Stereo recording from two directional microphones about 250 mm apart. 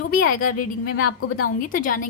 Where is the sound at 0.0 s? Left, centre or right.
Left.